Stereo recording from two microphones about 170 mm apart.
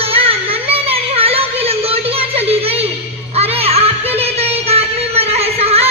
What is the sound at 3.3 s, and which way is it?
Music, 35° right (ahead or behind).